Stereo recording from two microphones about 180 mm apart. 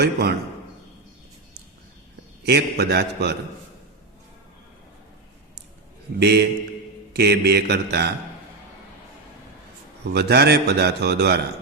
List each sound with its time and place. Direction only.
0.0 s a man's voice: 65° right (ahead or behind)
2.5 s a man's voice: 65° right (ahead or behind)
6.1 s a man's voice: 65° right (ahead or behind)
10.0 s a man's voice: 65° right (ahead or behind)